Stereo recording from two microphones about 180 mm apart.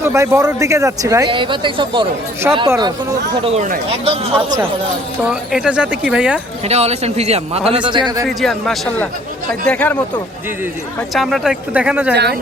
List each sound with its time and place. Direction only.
0.0 s speech: 15° right (ahead or behind)
2.5 s speech: 10° right (ahead or behind)
3.4 s a man's voice: 35° right (ahead or behind)
5.3 s speech: 5° right (ahead or behind)
6.7 s a man's voice: 35° right (ahead or behind)
8.4 s speech: centre (ahead or behind)
11.1 s speech: centre (ahead or behind)
12.1 s speech: 65° right (ahead or behind)